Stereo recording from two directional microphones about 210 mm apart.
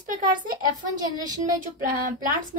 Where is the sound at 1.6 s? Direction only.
40° right (ahead or behind).